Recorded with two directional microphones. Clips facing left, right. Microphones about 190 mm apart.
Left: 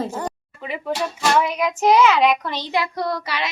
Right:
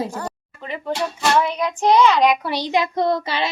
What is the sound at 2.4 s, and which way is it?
Speech, 15° right (ahead or behind).